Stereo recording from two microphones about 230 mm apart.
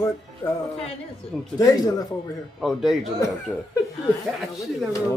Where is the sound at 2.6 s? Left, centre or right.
Centre.